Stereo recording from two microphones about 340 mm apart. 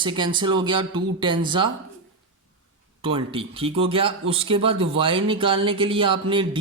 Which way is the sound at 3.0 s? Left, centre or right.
Centre.